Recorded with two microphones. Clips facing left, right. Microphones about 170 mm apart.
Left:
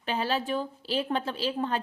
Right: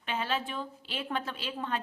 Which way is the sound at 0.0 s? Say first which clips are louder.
Left 4 dB; 35° left (ahead or behind).